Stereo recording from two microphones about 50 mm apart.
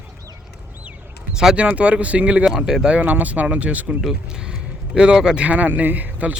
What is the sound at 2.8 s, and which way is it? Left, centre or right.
Speech, right.